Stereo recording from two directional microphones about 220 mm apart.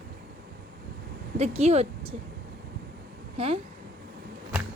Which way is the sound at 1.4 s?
30° right (ahead or behind).